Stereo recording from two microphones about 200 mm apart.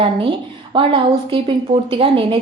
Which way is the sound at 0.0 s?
25° right (ahead or behind).